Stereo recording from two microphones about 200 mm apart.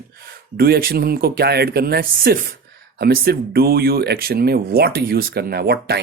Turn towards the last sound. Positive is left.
turn(degrees=-50)  # may be behind; listen again after turning